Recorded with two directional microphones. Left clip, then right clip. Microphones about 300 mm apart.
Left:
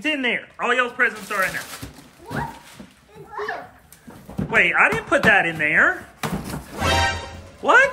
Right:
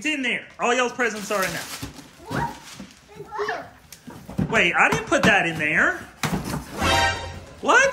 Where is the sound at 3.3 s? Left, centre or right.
Centre.